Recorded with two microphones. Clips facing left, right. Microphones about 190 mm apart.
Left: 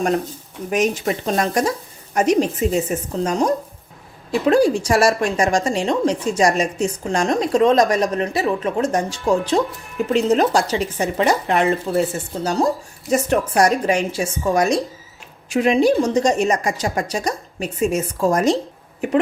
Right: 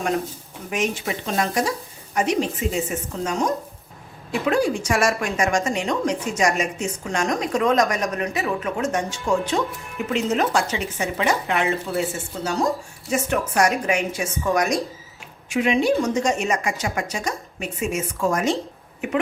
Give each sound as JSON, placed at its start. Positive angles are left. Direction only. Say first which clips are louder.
{"t": 0.7, "sound": "a woman's voice", "louder": "left 5 dB", "side_deg": 40}